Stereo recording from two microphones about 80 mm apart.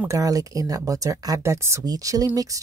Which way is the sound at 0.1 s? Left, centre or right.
Right.